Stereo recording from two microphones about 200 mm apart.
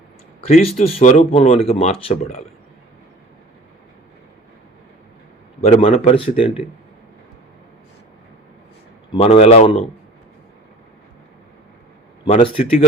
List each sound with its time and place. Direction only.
0.4 s speech: 30° left (ahead or behind)
5.5 s speech: 30° left (ahead or behind)
9.1 s speech: 30° left (ahead or behind)
12.2 s speech: 25° left (ahead or behind)